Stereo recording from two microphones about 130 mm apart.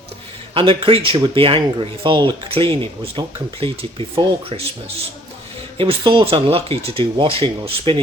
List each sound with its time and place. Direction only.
0.5 s speech: 40° right (ahead or behind)
5.7 s speech: 45° right (ahead or behind)